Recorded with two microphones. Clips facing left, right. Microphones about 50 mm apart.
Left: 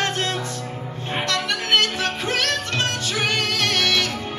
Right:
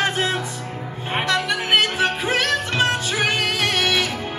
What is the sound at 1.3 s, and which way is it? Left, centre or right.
Music, centre.